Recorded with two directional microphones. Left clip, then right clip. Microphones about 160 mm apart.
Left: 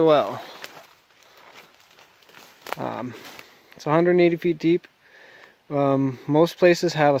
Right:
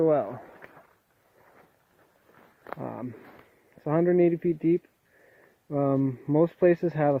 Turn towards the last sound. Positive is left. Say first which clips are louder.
# left 5 dB
turn(degrees=20)  # may be behind; listen again after turning